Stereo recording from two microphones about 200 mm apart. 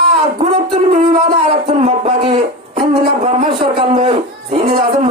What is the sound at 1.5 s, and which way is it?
Speech, 30° right (ahead or behind).